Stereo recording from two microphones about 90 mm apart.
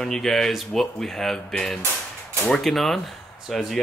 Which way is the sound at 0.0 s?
5° left (ahead or behind).